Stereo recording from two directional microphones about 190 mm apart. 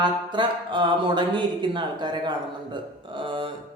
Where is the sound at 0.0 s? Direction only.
25° right (ahead or behind).